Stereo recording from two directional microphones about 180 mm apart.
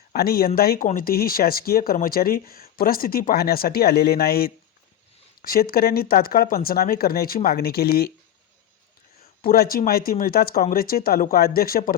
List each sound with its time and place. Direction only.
0.1 s speech: 60° left (ahead or behind)
9.4 s speech: 55° left (ahead or behind)